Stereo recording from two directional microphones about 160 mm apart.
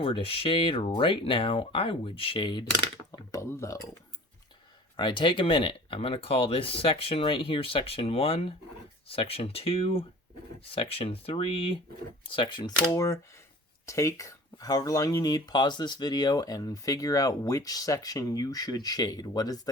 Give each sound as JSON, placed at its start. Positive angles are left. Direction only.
{"t": 0.0, "sound": "speech", "side_deg": 35}
{"t": 3.1, "sound": "a sound", "side_deg": 20}
{"t": 4.9, "sound": "speech", "side_deg": 30}
{"t": 12.8, "sound": "speech", "side_deg": 20}